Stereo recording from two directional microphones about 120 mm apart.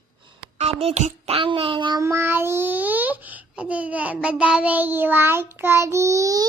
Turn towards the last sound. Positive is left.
turn(degrees=-30)  # may be behind; listen again after turning